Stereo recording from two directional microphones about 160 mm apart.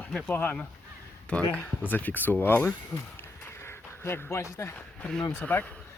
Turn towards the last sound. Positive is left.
turn(degrees=10)  # may be behind; listen again after turning